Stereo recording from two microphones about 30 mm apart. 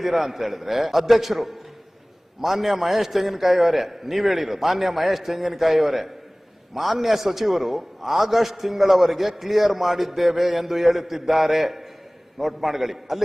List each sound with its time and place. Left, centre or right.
0.0 s a man's voice: centre